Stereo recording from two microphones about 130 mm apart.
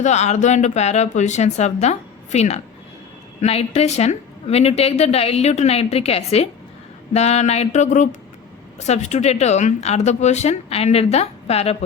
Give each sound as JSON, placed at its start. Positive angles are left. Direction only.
{"t": 0.0, "sound": "a woman's voice", "side_deg": 60}